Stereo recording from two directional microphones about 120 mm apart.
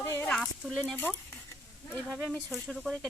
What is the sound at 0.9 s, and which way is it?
Speech, 15° left (ahead or behind).